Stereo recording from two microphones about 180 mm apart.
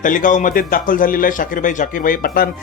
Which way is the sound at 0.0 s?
45° left (ahead or behind).